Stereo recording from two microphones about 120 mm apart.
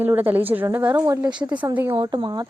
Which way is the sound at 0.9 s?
30° right (ahead or behind).